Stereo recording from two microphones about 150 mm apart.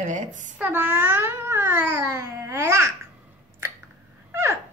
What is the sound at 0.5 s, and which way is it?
Babbling, 15° right (ahead or behind).